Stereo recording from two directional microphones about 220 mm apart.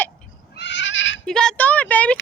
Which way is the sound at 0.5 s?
55° left (ahead or behind).